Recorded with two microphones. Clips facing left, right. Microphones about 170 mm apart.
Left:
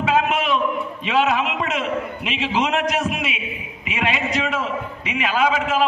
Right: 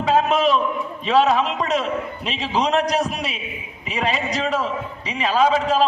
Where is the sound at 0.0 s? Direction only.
35° right (ahead or behind).